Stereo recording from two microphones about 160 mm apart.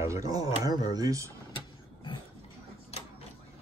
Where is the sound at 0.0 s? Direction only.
20° right (ahead or behind).